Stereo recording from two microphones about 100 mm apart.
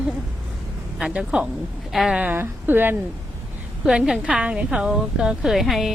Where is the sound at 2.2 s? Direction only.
20° right (ahead or behind).